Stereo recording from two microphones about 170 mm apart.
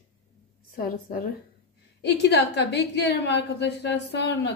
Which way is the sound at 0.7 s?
55° left (ahead or behind).